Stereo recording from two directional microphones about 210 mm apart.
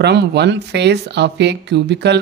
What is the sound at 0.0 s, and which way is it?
Speech, 55° right (ahead or behind).